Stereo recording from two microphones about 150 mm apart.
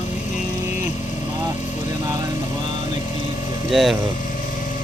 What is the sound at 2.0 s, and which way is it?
Vehicle, 20° right (ahead or behind).